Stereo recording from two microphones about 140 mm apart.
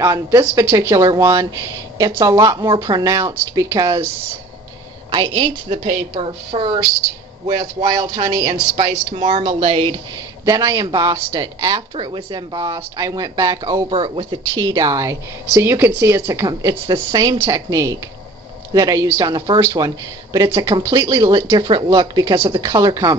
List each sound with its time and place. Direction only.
0.0 s a woman's voice: 20° right (ahead or behind)
5.1 s speech: 35° right (ahead or behind)
7.8 s a woman's voice: 25° right (ahead or behind)
8.7 s speech: 55° right (ahead or behind)
10.4 s a woman's voice: 20° right (ahead or behind)
11.9 s a woman's voice: 35° right (ahead or behind)
13.8 s speech: 40° right (ahead or behind)
14.5 s a woman's voice: 25° right (ahead or behind)